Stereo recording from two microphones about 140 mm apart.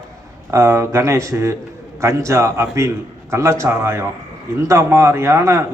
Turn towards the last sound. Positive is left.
turn(degrees=-20)  # may be behind; listen again after turning